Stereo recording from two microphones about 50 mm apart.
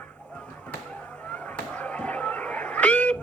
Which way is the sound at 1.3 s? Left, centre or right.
Left.